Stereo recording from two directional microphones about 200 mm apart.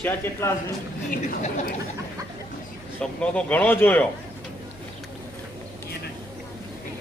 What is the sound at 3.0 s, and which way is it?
Speech, 5° left (ahead or behind).